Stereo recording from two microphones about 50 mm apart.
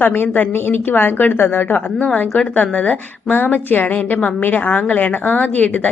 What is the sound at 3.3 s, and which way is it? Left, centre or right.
Speech, left.